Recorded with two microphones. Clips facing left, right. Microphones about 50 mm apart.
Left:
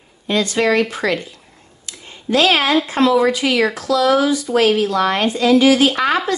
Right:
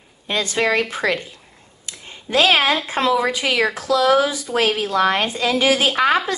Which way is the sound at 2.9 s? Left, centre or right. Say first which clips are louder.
Left 4 dB; right.